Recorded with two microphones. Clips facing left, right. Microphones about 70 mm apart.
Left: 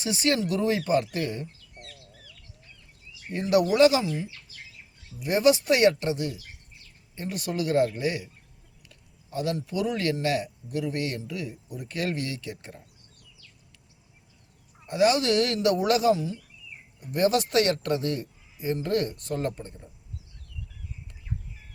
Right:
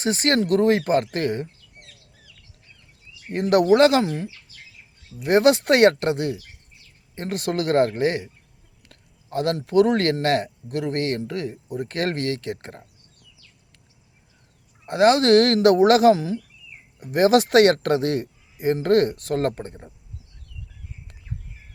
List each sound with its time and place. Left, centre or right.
0.0 s speech: right
3.3 s speech: right
7.3 s speech: right
8.9 s a sound: right
9.5 s speech: right
10.9 s speech: right
12.5 s speech: right
15.0 s speech: right